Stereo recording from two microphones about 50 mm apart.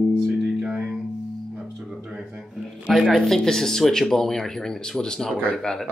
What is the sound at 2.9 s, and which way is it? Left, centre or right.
Speech, centre.